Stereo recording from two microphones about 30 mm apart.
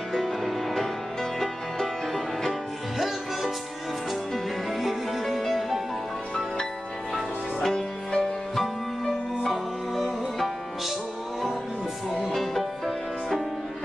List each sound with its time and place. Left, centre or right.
0.1 s music: centre
1.4 s music: centre
4.7 s music: centre
5.2 s music: centre
7.6 s music: left
8.5 s music: centre
12.4 s music: centre